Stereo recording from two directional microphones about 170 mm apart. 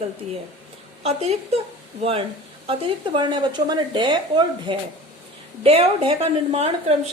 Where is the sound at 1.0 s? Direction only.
40° right (ahead or behind).